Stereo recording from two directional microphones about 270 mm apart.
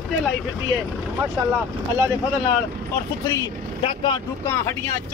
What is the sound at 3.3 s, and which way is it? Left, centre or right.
Speech, centre.